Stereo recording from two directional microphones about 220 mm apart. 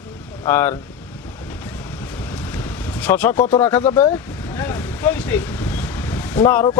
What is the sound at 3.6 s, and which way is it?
Speech, 10° left (ahead or behind).